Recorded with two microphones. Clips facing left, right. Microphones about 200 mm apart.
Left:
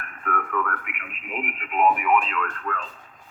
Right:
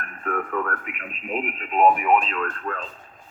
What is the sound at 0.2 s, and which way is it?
Speech, 35° right (ahead or behind).